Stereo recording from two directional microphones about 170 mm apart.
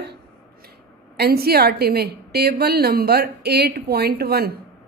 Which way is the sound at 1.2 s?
65° right (ahead or behind).